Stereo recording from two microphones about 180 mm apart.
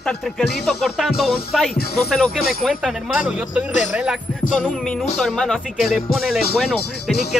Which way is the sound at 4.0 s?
5° right (ahead or behind).